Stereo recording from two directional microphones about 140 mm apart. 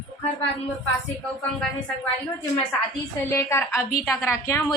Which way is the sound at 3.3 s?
15° left (ahead or behind).